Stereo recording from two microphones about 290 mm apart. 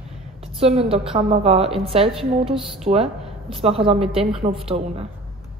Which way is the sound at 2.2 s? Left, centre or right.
Centre.